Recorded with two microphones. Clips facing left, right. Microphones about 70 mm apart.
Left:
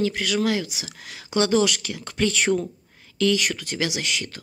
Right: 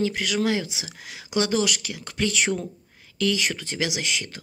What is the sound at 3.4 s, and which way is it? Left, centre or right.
Speech, right.